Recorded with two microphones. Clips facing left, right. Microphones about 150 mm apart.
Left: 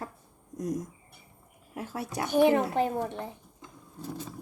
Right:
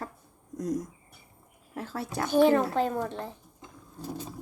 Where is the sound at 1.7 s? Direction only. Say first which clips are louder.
Right 1 dB; 15° left (ahead or behind).